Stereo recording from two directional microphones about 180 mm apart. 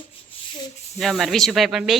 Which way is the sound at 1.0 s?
Centre (ahead or behind).